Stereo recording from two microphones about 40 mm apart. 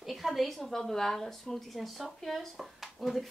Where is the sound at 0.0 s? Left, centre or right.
Centre.